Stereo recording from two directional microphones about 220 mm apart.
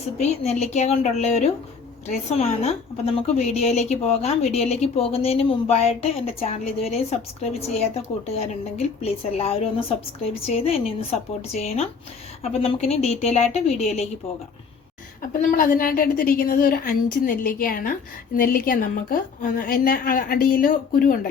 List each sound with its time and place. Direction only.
0.2 s a woman's voice: 30° left (ahead or behind)
9.0 s a woman's voice: 25° left (ahead or behind)
15.3 s a woman's voice: 40° left (ahead or behind)